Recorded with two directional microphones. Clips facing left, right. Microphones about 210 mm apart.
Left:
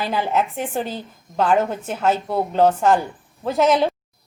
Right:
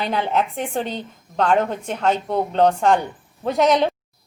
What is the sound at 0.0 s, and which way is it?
A woman's voice, 5° left (ahead or behind).